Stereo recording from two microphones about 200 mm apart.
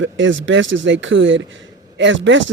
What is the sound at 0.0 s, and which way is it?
Speech, 70° right (ahead or behind).